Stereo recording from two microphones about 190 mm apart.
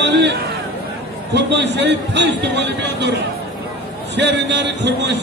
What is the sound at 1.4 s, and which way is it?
A man's voice, 65° right (ahead or behind).